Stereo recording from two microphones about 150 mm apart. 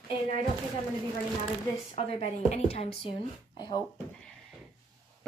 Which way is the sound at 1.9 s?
45° left (ahead or behind).